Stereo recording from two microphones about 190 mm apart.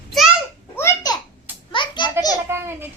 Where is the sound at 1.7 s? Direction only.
25° left (ahead or behind).